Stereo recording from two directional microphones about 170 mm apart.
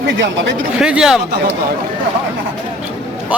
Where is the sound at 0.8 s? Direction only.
5° right (ahead or behind).